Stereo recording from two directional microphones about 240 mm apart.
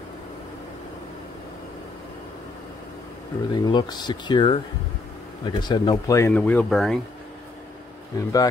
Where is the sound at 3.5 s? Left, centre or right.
Centre.